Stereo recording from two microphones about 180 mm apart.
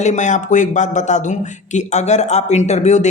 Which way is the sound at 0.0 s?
40° left (ahead or behind).